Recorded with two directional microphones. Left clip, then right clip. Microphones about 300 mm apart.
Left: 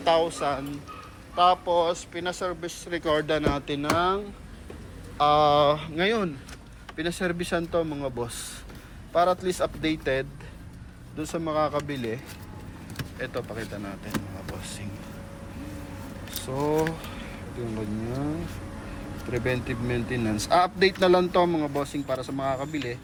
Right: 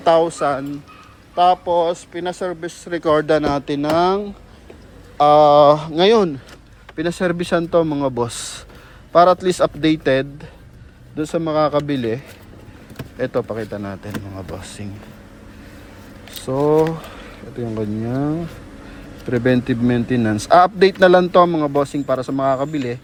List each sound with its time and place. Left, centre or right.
0.0 s a man's voice: right
5.2 s a man's voice: right
13.1 s a man's voice: right
16.6 s a man's voice: right
19.3 s a man's voice: right